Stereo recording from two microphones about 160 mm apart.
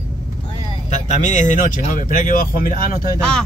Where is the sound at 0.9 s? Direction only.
50° left (ahead or behind).